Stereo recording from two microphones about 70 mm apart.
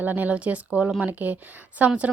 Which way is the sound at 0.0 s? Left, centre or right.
Right.